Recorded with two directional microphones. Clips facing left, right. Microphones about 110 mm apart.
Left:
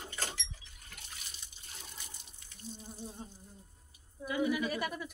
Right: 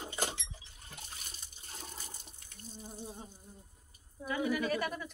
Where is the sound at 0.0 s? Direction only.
20° right (ahead or behind).